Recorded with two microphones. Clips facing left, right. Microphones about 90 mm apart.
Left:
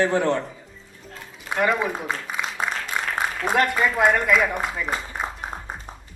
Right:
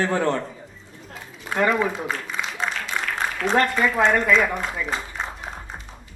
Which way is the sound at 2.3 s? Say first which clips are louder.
Even; 45° left (ahead or behind).